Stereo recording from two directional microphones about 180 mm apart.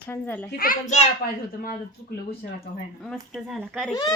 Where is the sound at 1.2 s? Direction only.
55° left (ahead or behind).